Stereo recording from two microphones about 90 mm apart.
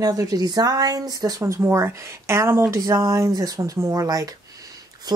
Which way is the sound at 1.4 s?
30° right (ahead or behind).